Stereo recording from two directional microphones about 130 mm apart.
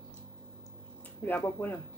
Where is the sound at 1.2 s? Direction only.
15° left (ahead or behind).